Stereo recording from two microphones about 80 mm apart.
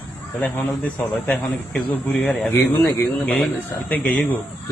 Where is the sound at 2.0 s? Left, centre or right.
Centre.